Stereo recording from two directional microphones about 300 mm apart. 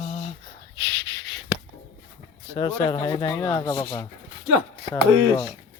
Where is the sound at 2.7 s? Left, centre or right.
Centre.